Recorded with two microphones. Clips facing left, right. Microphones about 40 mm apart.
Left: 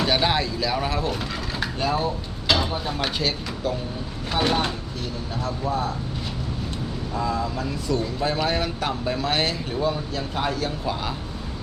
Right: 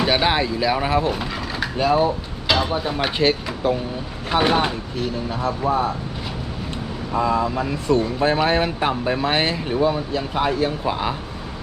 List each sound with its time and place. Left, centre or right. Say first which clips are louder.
0.0 s speech: right 3 dB; centre
1.1 s speech: right 3 dB; centre
3.2 s speech: right 7 dB; right
4.3 s speech: right 5 dB; centre
4.9 s speech: right 6 dB; right
7.1 s speech: right 7 dB; right